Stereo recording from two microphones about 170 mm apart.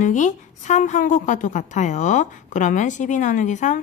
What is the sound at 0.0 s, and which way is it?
A woman's voice, 45° left (ahead or behind).